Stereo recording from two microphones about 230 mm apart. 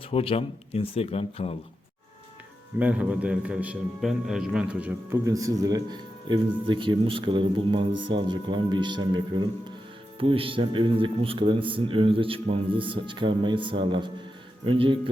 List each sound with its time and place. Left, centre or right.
0.1 s speech: left
2.7 s a man's voice: centre; by 14.9 s right